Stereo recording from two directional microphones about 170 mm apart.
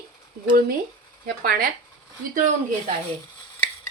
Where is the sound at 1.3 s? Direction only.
60° right (ahead or behind).